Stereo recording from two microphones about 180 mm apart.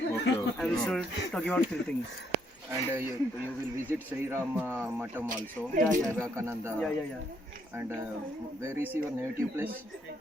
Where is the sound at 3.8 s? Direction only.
10° right (ahead or behind).